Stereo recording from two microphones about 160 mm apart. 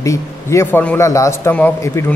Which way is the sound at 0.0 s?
20° left (ahead or behind).